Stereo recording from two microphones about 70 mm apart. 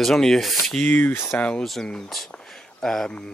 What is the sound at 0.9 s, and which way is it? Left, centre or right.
Speech, left.